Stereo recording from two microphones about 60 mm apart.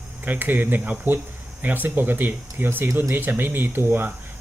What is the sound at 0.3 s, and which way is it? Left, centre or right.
Speech, right.